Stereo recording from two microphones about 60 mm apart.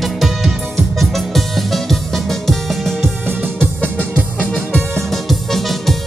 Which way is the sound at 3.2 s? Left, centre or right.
Right.